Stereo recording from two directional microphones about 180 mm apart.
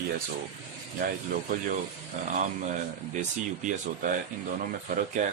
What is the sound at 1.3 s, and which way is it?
Speech, 50° right (ahead or behind).